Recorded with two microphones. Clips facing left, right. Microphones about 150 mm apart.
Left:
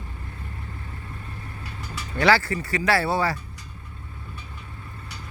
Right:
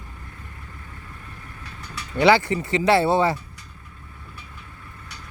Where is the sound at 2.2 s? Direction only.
20° right (ahead or behind).